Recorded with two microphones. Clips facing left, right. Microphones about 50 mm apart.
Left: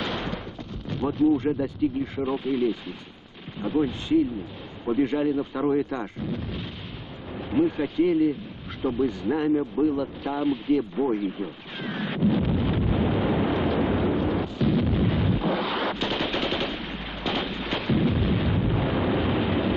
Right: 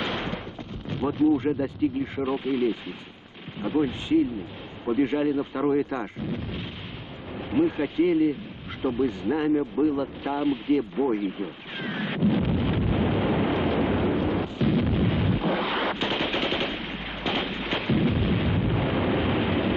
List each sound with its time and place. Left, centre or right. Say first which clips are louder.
0.0 s a sound: even; centre
0.8 s speech: even; centre
9.5 s speech: even; centre
9.9 s speech: even; centre
11.2 s wind noise: even; centre